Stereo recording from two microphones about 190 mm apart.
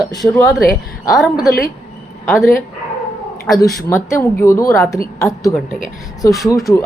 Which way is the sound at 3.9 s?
15° left (ahead or behind).